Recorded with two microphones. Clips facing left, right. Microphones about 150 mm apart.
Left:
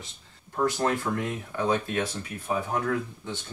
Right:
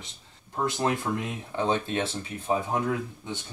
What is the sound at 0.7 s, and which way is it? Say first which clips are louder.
Speech: even; 20° right (ahead or behind).